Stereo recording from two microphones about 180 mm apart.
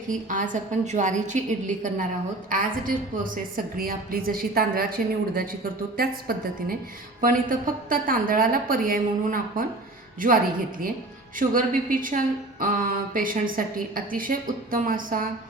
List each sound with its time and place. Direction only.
0.1 s a woman's voice: 45° right (ahead or behind)
3.5 s a woman's voice: 55° right (ahead or behind)